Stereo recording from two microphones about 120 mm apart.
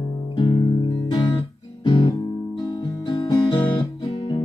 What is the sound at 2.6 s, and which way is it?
Guitar, 35° left (ahead or behind).